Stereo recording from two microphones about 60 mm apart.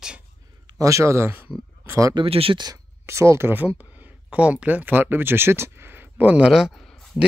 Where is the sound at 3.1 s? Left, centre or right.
Right.